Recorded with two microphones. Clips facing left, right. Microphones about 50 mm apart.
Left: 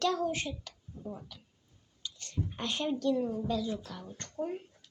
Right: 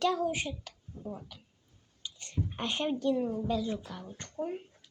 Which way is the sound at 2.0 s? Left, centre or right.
Centre.